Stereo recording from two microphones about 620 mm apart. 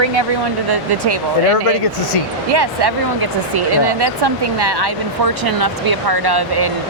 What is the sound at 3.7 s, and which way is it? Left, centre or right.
Speech, right.